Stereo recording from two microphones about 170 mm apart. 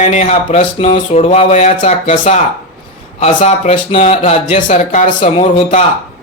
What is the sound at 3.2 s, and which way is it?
Speech, 40° left (ahead or behind).